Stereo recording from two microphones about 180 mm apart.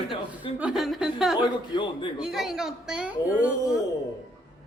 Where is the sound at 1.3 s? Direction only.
25° left (ahead or behind).